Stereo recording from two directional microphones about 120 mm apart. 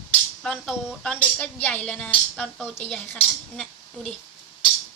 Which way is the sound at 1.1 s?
15° left (ahead or behind).